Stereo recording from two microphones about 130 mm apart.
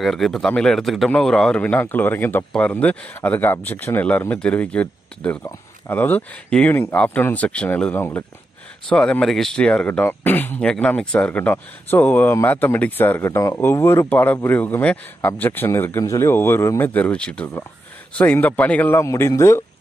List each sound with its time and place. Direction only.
0.0 s speech: centre (ahead or behind); by 8.3 s 15° left (ahead or behind)
8.8 s speech: 5° left (ahead or behind); by 19.6 s 20° left (ahead or behind)